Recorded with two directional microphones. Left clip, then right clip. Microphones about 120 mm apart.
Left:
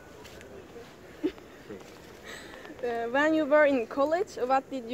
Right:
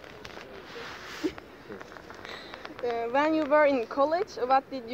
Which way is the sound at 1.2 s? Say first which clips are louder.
Left 1 dB; 30° left (ahead or behind).